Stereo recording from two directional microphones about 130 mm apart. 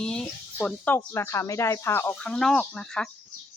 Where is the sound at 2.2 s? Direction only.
5° left (ahead or behind).